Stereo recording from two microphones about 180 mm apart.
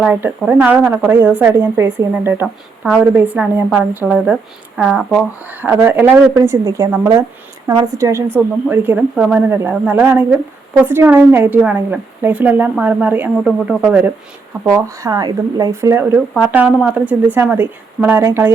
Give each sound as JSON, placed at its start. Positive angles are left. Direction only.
{"t": 0.0, "sound": "a woman's voice", "side_deg": -10}
{"t": 14.6, "sound": "a woman's voice", "side_deg": -15}